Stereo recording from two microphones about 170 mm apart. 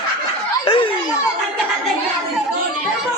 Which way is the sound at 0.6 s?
30° left (ahead or behind).